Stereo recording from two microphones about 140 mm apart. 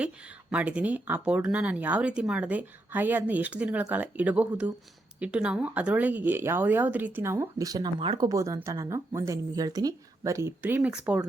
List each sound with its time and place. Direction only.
0.5 s speech: 10° right (ahead or behind)